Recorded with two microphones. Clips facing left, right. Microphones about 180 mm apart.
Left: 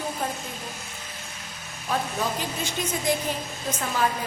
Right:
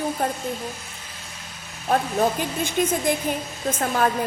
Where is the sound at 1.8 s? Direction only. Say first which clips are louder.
Right 6 dB; 50° right (ahead or behind).